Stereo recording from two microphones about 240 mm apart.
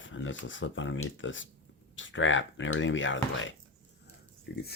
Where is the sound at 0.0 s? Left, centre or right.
Left.